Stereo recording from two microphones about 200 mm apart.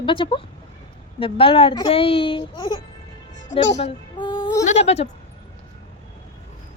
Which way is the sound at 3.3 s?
40° left (ahead or behind).